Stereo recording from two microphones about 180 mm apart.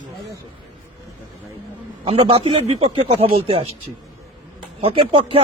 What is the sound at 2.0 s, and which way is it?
A man's voice, 35° right (ahead or behind).